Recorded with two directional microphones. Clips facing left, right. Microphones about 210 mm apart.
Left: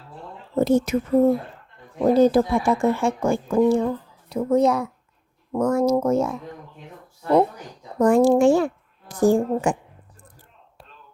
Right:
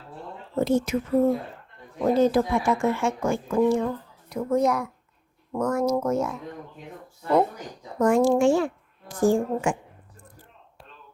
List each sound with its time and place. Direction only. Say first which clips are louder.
0.5 s speech: left 4 dB; 40° left (ahead or behind)
2.0 s speech: left 4 dB; 35° left (ahead or behind)
7.9 s a woman's voice: left 4 dB; 35° left (ahead or behind)